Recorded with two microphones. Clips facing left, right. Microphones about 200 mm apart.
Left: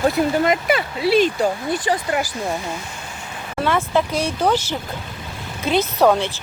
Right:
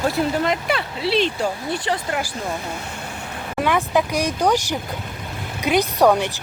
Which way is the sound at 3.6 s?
15° right (ahead or behind).